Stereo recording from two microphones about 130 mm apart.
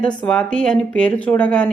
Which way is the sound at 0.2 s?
5° left (ahead or behind).